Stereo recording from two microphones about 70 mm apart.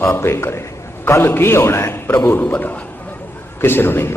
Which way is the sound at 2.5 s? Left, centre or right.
Left.